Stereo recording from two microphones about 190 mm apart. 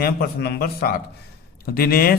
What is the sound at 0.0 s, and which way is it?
Speech, 55° left (ahead or behind).